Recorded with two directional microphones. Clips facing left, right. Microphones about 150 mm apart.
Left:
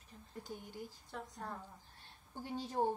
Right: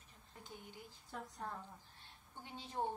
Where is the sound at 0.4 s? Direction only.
40° left (ahead or behind).